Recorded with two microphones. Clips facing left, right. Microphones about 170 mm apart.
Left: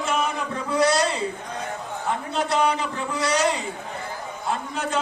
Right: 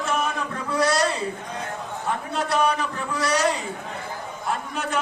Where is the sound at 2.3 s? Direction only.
25° left (ahead or behind).